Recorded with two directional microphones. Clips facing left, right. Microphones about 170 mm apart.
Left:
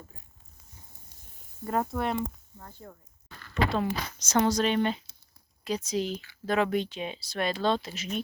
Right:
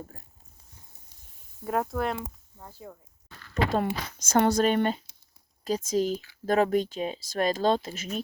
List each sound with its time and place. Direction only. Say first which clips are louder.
1.6 s speech: right 1 dB; centre (ahead or behind)
3.5 s speech: right 1 dB; 45° right (ahead or behind)